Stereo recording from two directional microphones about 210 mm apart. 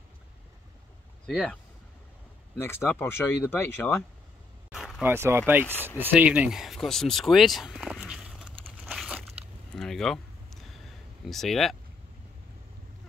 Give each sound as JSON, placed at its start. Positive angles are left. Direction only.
{"t": 1.2, "sound": "speech", "side_deg": 5}
{"t": 2.6, "sound": "speech", "side_deg": 10}
{"t": 4.6, "sound": "a sound", "side_deg": 0}
{"t": 5.0, "sound": "speech", "side_deg": -10}
{"t": 5.5, "sound": "a sound", "side_deg": -10}
{"t": 11.2, "sound": "speech", "side_deg": 0}